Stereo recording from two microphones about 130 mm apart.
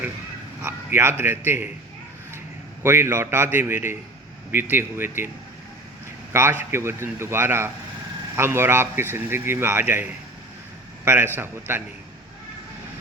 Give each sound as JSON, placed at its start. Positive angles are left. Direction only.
{"t": 0.6, "sound": "a man's voice", "side_deg": -20}
{"t": 2.8, "sound": "a man's voice", "side_deg": -20}
{"t": 6.3, "sound": "a man's voice", "side_deg": -20}